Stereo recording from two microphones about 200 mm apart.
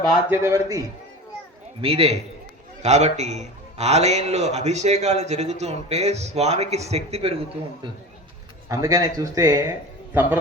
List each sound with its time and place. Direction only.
0.3 s speech: 15° right (ahead or behind)
1.8 s a man's voice: 30° right (ahead or behind)
8.7 s speech: 15° right (ahead or behind)